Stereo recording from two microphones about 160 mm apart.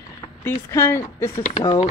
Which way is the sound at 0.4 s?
15° left (ahead or behind).